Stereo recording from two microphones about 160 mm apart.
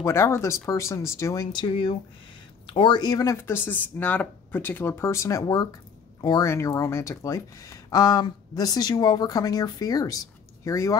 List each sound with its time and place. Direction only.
0.0 s speech: 15° left (ahead or behind)